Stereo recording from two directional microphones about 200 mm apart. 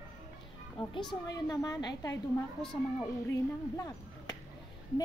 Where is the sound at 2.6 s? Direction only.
5° left (ahead or behind).